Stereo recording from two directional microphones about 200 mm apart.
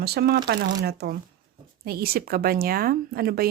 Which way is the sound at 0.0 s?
50° right (ahead or behind).